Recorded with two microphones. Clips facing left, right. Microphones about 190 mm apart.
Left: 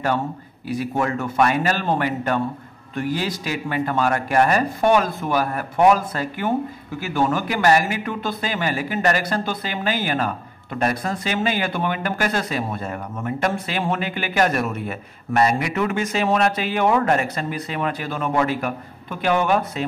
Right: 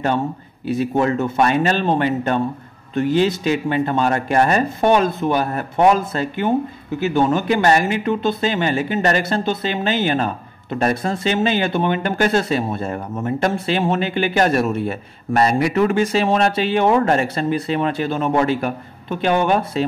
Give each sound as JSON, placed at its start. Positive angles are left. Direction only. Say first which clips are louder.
{"t": 0.7, "sound": "speech", "louder": "right 5 dB", "side_deg": -25}